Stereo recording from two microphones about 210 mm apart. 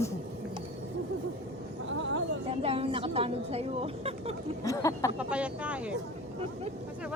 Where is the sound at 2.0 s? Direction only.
65° right (ahead or behind).